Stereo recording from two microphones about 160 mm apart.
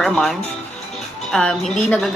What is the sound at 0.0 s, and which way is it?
A woman's voice, centre (ahead or behind).